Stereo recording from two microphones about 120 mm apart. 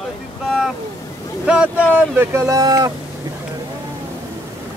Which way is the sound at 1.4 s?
10° right (ahead or behind).